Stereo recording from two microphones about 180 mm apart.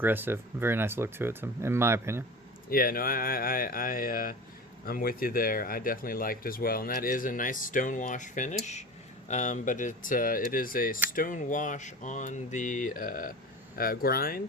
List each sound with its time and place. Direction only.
0.0 s speech: 10° right (ahead or behind)
2.6 s speech: 55° left (ahead or behind)